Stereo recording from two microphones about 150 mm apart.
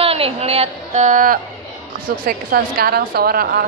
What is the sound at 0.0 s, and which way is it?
A woman's voice, 40° right (ahead or behind).